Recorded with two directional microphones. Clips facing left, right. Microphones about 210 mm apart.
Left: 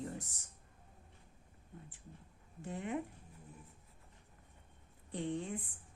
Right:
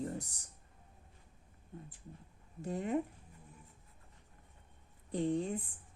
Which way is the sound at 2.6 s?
40° right (ahead or behind).